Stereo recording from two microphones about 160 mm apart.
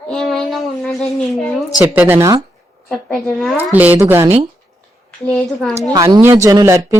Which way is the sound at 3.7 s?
10° right (ahead or behind).